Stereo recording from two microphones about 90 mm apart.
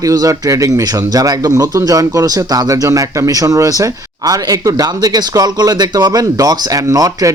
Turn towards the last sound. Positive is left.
turn(degrees=-40)  # may be behind; listen again after turning